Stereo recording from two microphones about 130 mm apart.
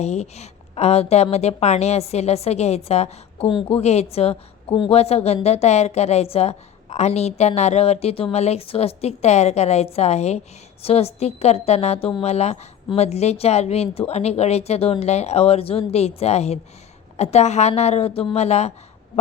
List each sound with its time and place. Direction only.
0.0 s a woman's voice: 55° left (ahead or behind)